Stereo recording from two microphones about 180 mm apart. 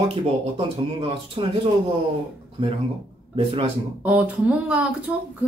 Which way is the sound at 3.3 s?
30° right (ahead or behind).